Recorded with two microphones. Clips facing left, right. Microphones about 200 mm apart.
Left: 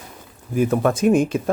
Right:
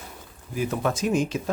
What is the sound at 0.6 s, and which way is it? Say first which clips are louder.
Speech: left 7 dB; 55° left (ahead or behind).